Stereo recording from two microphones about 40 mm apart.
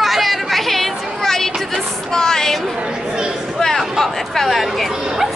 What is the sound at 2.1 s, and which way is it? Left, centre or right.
Music, centre.